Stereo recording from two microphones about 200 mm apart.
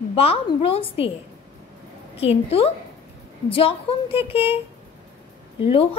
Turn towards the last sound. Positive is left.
turn(degrees=30)  # may be behind; listen again after turning